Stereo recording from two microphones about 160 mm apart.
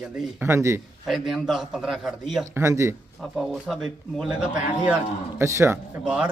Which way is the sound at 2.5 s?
20° right (ahead or behind).